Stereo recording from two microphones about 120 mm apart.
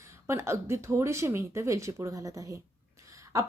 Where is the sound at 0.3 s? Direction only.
20° right (ahead or behind).